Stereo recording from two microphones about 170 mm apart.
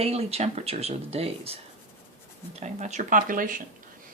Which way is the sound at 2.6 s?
40° right (ahead or behind).